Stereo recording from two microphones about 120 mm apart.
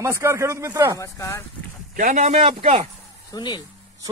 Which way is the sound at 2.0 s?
80° right.